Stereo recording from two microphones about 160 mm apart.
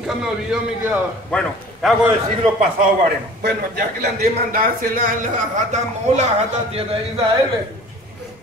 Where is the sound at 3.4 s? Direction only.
80° right; by 6.2 s 50° right (ahead or behind).